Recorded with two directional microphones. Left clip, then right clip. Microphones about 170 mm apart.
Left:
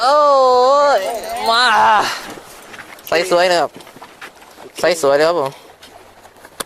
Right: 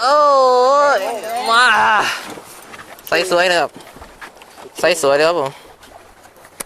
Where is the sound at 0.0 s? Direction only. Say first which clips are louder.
Even; 20° left (ahead or behind).